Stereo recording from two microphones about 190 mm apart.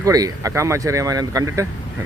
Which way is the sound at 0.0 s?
20° right (ahead or behind).